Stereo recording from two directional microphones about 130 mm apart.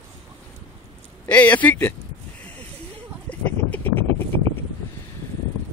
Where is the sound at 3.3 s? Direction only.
10° left (ahead or behind).